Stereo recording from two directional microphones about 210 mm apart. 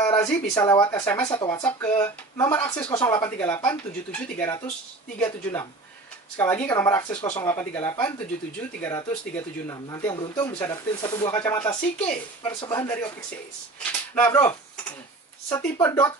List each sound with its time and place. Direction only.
0.1 s speech: 15° left (ahead or behind)
1.1 s speech: 20° left (ahead or behind)
1.6 s speech: 10° left (ahead or behind)
8.8 s speech: 15° left (ahead or behind)
12.5 s speech: 20° left (ahead or behind)
14.1 s speech: 10° left (ahead or behind)